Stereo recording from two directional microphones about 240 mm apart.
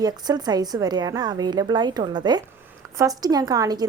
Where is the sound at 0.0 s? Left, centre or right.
Centre.